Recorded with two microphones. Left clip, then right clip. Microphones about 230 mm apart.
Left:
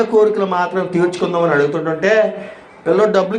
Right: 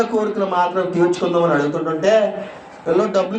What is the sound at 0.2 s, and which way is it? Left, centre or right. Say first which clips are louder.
A man's voice: left 4 dB; left.